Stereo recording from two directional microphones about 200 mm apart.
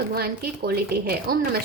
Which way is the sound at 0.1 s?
50° right (ahead or behind).